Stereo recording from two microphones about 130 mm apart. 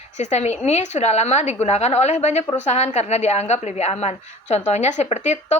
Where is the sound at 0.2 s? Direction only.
60° left (ahead or behind).